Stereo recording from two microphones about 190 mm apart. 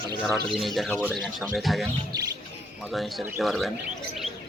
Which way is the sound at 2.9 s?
Centre (ahead or behind).